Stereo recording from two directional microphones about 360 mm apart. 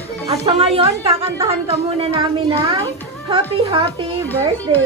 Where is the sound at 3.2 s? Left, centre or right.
Centre.